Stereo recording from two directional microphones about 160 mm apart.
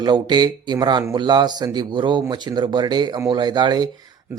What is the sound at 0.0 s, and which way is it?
Speech, 25° right (ahead or behind).